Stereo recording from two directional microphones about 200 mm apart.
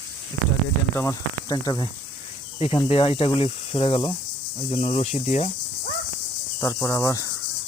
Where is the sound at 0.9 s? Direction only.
15° left (ahead or behind).